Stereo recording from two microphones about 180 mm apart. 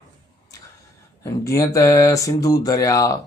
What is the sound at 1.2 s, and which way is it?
Speech, 15° left (ahead or behind).